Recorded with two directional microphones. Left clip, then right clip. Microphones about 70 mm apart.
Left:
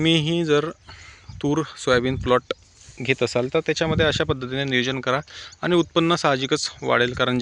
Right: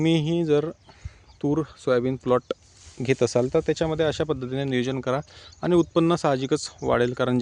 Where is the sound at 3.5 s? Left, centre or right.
Right.